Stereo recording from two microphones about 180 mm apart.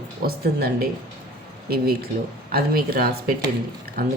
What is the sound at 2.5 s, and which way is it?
Speech, 55° right (ahead or behind).